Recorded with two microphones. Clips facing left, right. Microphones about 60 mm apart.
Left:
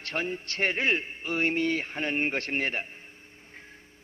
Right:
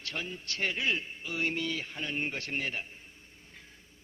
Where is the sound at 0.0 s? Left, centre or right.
Left.